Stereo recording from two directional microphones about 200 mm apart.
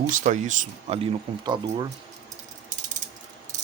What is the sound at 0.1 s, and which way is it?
Speech, 40° right (ahead or behind).